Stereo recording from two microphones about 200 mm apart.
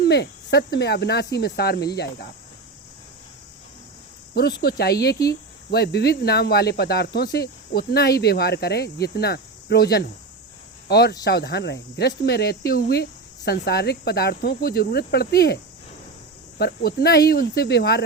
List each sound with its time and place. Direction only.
0.0 s speech: 55° left (ahead or behind)
4.6 s speech: 50° left (ahead or behind)
16.6 s speech: 55° left (ahead or behind)